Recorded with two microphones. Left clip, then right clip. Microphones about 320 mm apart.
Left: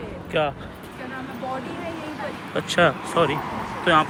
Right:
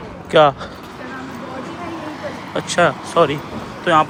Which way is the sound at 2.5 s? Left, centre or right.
Centre.